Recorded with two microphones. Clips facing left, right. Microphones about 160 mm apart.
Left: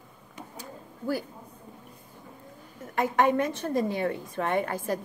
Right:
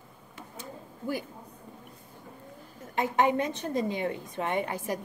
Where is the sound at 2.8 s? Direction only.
20° right (ahead or behind).